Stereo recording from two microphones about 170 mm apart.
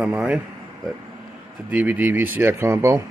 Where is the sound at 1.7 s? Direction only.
10° right (ahead or behind).